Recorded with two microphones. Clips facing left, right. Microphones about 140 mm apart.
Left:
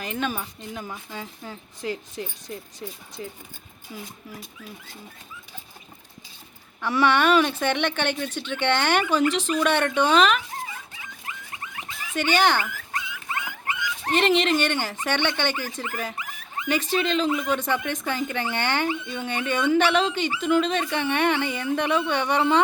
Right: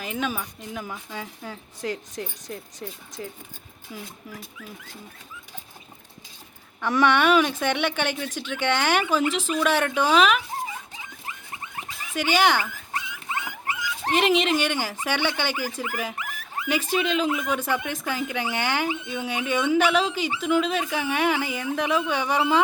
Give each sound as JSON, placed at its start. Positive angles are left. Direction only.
{"t": 0.0, "sound": "speech", "side_deg": -5}
{"t": 1.5, "sound": "speech", "side_deg": 10}
{"t": 3.9, "sound": "speech", "side_deg": 0}
{"t": 7.0, "sound": "speech", "side_deg": -10}
{"t": 12.1, "sound": "speech", "side_deg": -5}
{"t": 13.3, "sound": "dog", "side_deg": -20}
{"t": 13.7, "sound": "dog", "side_deg": -35}
{"t": 14.1, "sound": "speech", "side_deg": -5}